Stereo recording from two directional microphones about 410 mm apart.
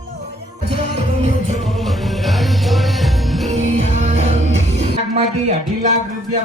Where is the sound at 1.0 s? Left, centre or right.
Centre.